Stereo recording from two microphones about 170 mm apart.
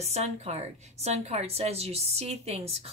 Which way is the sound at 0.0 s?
40° right (ahead or behind).